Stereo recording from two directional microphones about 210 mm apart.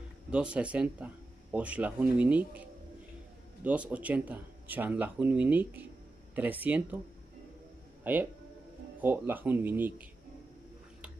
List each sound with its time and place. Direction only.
0.3 s speech: 5° right (ahead or behind)
8.0 s speech: 10° right (ahead or behind)